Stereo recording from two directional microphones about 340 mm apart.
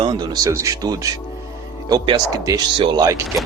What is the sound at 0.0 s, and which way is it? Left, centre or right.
Speech, centre.